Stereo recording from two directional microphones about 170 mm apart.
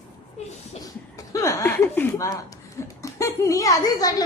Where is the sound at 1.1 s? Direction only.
20° left (ahead or behind).